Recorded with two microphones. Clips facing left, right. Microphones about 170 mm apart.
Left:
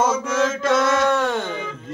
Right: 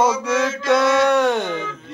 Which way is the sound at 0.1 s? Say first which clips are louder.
Even; 15° right (ahead or behind).